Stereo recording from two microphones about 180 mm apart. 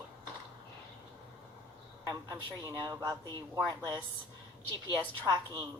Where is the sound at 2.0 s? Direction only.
20° right (ahead or behind).